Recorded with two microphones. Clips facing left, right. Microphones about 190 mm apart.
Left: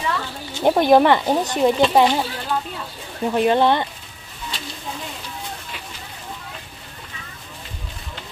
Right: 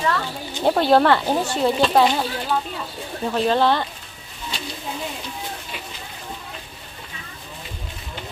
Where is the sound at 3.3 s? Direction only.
15° left (ahead or behind).